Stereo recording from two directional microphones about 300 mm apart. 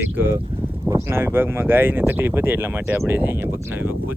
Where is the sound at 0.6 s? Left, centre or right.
Centre.